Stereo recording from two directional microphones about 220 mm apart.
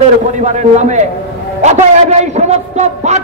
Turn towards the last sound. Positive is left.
turn(degrees=-30)  # may be behind; listen again after turning